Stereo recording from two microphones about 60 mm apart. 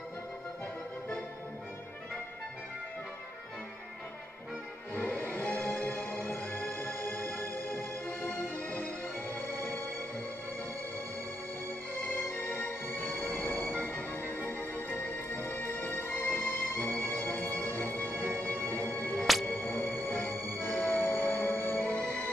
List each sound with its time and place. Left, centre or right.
4.9 s music: left
12.3 s music: left